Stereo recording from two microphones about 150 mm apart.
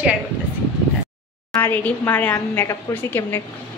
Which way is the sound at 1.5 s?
10° left (ahead or behind).